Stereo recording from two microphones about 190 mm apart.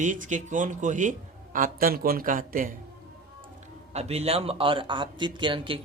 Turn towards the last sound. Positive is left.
turn(degrees=-25)  # may be behind; listen again after turning